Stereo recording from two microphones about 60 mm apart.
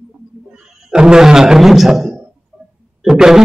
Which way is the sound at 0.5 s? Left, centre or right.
Centre.